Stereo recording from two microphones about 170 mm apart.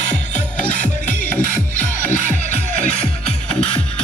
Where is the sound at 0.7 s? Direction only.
50° left (ahead or behind).